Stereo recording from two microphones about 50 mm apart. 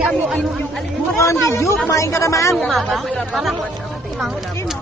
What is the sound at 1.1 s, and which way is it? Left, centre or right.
A woman's voice, left.